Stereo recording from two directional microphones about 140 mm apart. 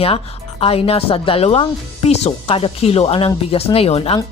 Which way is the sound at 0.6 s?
45° left (ahead or behind).